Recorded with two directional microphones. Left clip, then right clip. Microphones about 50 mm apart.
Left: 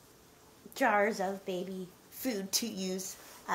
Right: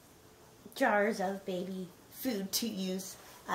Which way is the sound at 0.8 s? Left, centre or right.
Left.